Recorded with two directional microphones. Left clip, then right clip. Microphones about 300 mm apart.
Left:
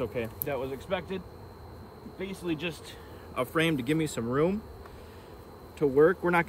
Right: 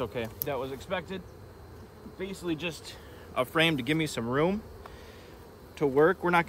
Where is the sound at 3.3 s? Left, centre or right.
Centre.